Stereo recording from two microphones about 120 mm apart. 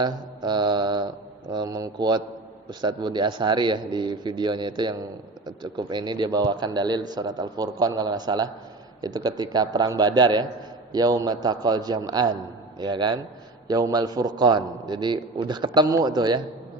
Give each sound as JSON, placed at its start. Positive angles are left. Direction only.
{"t": 0.0, "sound": "mantra", "side_deg": -40}
{"t": 2.6, "sound": "a man's voice", "side_deg": -40}